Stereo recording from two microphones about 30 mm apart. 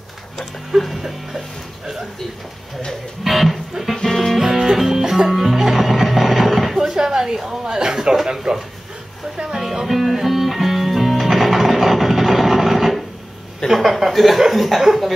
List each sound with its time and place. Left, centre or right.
0.7 s speech: centre
3.3 s speech: centre
3.8 s speech: centre
4.1 s music: centre
4.4 s music: centre
6.9 s a sound: centre
7.6 s speech: right
9.5 s music: centre
13.7 s speech: centre